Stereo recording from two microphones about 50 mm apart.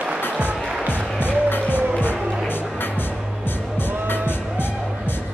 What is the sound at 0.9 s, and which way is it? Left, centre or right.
Music, left.